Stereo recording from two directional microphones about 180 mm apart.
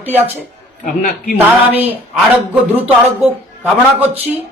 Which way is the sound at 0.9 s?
55° left (ahead or behind).